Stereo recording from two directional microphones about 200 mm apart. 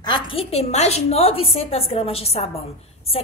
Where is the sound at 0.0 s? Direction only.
25° left (ahead or behind).